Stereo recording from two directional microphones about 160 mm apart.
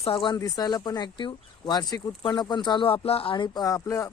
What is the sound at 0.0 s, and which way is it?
Speech, 35° left (ahead or behind).